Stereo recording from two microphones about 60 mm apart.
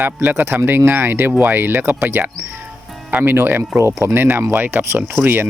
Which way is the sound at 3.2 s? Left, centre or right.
Right.